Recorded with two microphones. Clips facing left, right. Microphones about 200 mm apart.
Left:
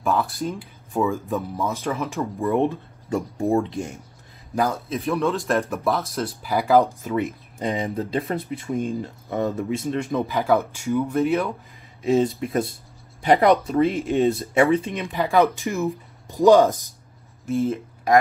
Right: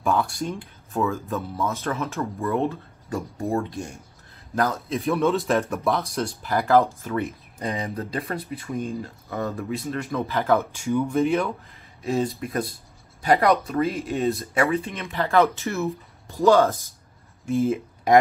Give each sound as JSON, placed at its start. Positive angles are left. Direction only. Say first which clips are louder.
{"t": 0.0, "sound": "speech", "louder": "left 1 dB", "side_deg": 0}
{"t": 0.9, "sound": "speech", "louder": "left 2 dB", "side_deg": 15}
{"t": 4.6, "sound": "speech", "louder": "left 1 dB", "side_deg": 10}
{"t": 7.1, "sound": "speech", "louder": "left 3 dB", "side_deg": 15}
{"t": 12.0, "sound": "speech", "louder": "left 5 dB", "side_deg": 20}
{"t": 17.5, "sound": "speech", "louder": "right 1 dB", "side_deg": 0}